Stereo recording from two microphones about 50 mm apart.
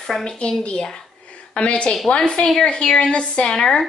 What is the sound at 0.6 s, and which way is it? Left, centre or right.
Speech, left.